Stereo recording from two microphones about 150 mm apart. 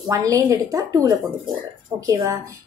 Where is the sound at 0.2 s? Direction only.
25° right (ahead or behind).